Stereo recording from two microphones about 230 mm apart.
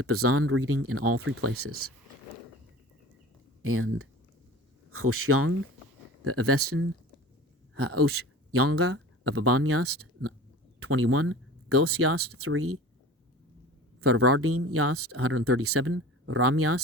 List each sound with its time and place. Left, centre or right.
0.0 s speech: right
3.6 s speech: right
14.0 s speech: right